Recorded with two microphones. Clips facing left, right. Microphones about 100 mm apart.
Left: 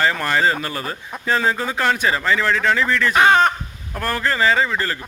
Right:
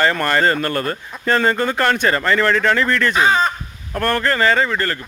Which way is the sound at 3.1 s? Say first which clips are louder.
Left 4 dB; 60° left (ahead or behind).